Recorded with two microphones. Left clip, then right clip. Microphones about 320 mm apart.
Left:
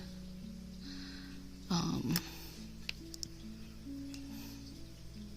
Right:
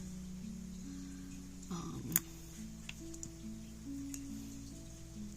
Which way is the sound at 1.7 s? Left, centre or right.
Left.